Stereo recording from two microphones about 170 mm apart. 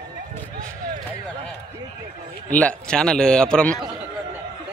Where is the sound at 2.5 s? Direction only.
5° left (ahead or behind).